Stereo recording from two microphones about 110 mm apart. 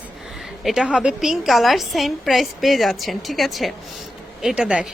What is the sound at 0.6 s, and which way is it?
A woman's voice, 5° right (ahead or behind).